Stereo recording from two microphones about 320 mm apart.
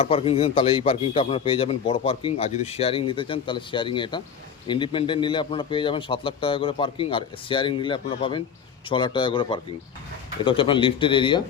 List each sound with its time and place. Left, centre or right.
0.0 s a man's voice: centre